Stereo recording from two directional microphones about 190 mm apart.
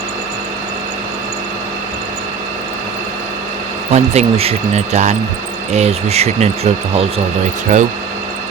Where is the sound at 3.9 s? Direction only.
35° right (ahead or behind).